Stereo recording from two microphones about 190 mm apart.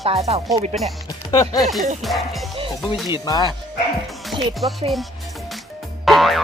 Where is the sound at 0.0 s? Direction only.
35° right (ahead or behind).